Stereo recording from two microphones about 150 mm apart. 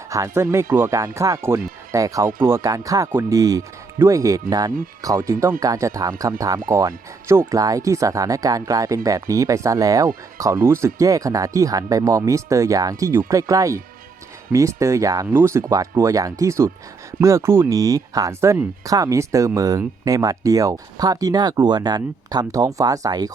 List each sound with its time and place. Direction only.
0.1 s speech: 20° right (ahead or behind)